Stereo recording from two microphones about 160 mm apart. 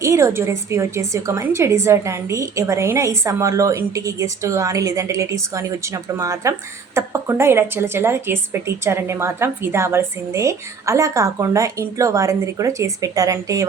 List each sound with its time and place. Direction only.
0.0 s a woman's voice: 20° right (ahead or behind)